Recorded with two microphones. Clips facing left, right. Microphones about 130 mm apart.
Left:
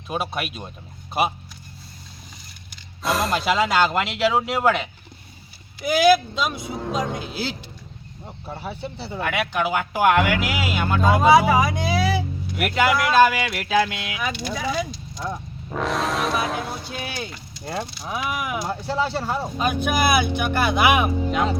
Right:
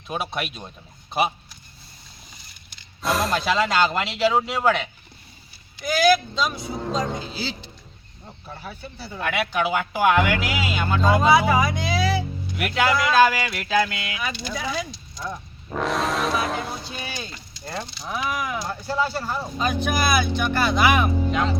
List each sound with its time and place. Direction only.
0.1 s speech: 5° left (ahead or behind)
3.0 s speech: centre (ahead or behind)
8.5 s speech: 30° left (ahead or behind)
9.2 s speech: centre (ahead or behind)
15.7 s music: centre (ahead or behind)
17.9 s speech: 5° left (ahead or behind)
18.8 s speech: 25° left (ahead or behind)
19.5 s speech: 10° left (ahead or behind)